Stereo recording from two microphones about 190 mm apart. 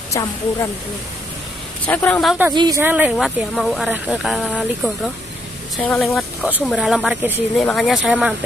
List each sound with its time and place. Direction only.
0.1 s speech: 15° left (ahead or behind)
1.9 s speech: 10° left (ahead or behind)
2.5 s a woman's voice: 25° right (ahead or behind)
2.8 s speech: 10° right (ahead or behind)
5.8 s speech: 5° left (ahead or behind)